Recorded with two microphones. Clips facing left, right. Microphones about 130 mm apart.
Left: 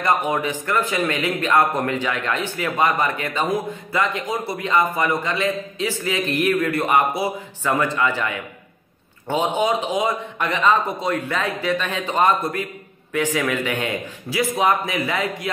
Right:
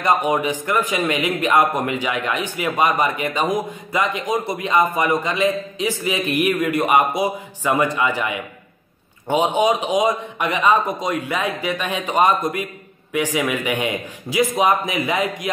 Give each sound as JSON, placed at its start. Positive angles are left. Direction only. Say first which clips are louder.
{"t": 0.0, "sound": "a man's voice", "louder": "right 2 dB", "side_deg": -15}